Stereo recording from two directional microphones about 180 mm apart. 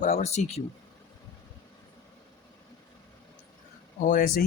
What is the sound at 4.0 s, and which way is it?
Speech, 50° left (ahead or behind).